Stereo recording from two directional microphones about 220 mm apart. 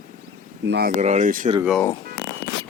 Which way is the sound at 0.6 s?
50° right (ahead or behind).